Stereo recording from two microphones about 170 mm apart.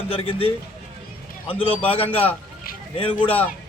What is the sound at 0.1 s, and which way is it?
A man's voice, 35° left (ahead or behind).